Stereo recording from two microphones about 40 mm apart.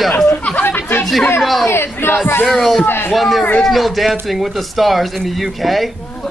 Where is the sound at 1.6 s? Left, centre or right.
Left.